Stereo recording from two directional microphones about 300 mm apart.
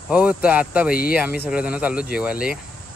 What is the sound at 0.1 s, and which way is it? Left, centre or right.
Speech, centre.